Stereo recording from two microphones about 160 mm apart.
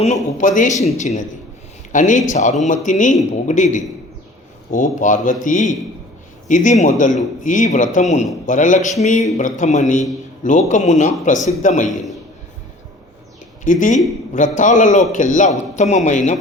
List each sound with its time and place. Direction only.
0.0 s a man's voice: 50° left (ahead or behind)
13.7 s a man's voice: 55° left (ahead or behind)